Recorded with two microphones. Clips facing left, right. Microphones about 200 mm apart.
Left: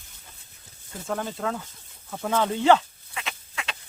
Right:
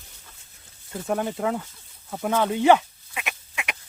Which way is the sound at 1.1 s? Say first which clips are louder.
Right 4 dB; 20° right (ahead or behind).